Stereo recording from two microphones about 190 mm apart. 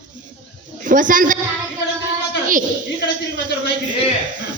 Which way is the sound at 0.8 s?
45° right (ahead or behind).